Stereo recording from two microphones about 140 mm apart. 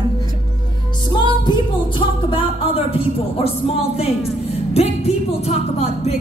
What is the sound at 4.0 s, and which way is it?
Speech, 45° left (ahead or behind).